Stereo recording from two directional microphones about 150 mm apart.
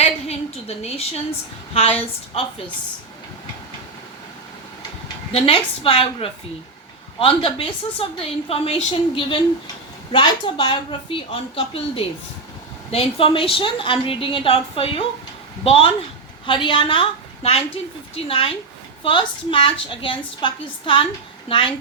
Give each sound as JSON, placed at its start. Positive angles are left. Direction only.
{"t": 0.0, "sound": "a woman's voice", "side_deg": 45}
{"t": 5.3, "sound": "a woman's voice", "side_deg": 40}